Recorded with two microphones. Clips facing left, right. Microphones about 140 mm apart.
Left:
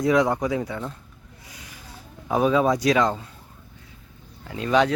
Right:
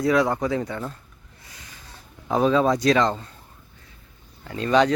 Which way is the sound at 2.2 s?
10° left (ahead or behind).